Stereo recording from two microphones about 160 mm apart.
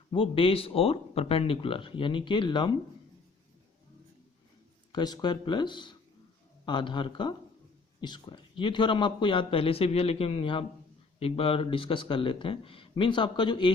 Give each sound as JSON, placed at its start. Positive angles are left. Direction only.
{"t": 0.1, "sound": "speech", "side_deg": 35}
{"t": 4.9, "sound": "speech", "side_deg": 25}